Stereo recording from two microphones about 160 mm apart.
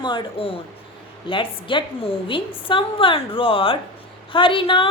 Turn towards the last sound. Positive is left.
turn(degrees=35)  # may be behind; listen again after turning